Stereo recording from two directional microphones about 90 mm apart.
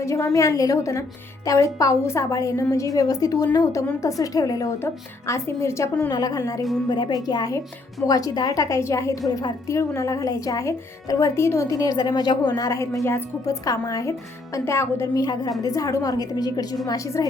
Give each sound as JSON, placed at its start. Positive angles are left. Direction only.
{"t": 0.0, "sound": "speech", "side_deg": 35}
{"t": 6.1, "sound": "a woman's voice", "side_deg": 45}
{"t": 6.8, "sound": "a woman's voice", "side_deg": 50}
{"t": 15.1, "sound": "a woman's voice", "side_deg": 45}